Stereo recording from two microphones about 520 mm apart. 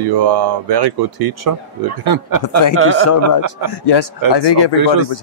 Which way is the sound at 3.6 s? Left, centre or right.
Left.